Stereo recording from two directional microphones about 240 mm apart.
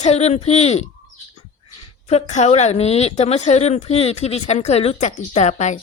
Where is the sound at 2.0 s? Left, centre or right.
Left.